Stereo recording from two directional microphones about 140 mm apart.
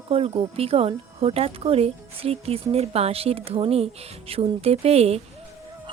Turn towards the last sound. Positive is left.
turn(degrees=-45)  # may be behind; listen again after turning